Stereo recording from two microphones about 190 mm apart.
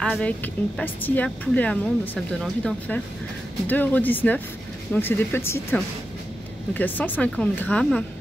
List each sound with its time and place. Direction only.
0.0 s speech: 5° left (ahead or behind)